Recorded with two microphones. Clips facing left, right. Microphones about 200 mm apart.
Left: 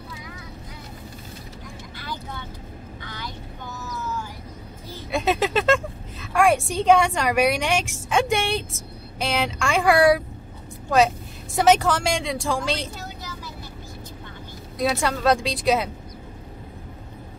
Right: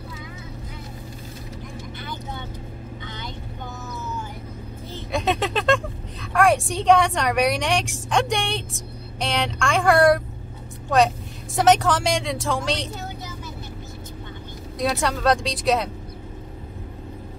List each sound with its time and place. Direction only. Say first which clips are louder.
2.0 s vehicle: left 1 dB; 20° right (ahead or behind)
5.1 s a woman's voice: left 2 dB; centre (ahead or behind)
14.8 s a woman's voice: even; centre (ahead or behind)